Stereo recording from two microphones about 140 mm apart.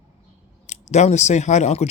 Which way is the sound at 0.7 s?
55° left (ahead or behind).